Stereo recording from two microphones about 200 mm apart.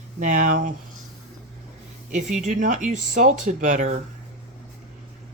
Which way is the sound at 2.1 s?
35° right (ahead or behind).